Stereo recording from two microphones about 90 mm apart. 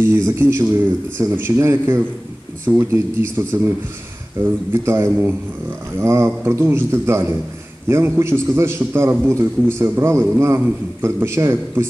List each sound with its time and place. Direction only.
0.0 s a man's voice: 25° right (ahead or behind)